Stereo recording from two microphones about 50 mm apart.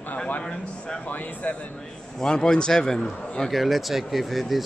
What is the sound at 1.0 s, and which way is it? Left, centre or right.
Speech, left.